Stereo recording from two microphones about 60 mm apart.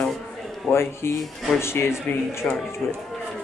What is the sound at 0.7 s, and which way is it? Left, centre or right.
Speech, left.